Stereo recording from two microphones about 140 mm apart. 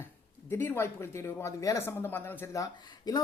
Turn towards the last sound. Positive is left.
turn(degrees=25)  # may be behind; listen again after turning